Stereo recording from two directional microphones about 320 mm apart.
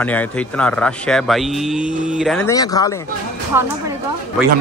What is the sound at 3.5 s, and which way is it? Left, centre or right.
Speech, centre.